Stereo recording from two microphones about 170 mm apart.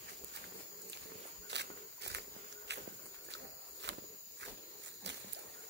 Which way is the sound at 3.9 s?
90° right.